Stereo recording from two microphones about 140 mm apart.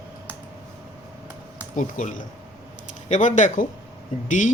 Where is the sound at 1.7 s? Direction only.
70° left (ahead or behind).